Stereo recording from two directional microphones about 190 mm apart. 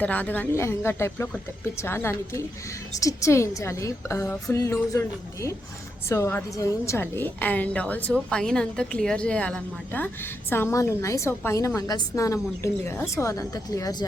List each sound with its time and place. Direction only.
0.0 s a woman's voice: 10° left (ahead or behind)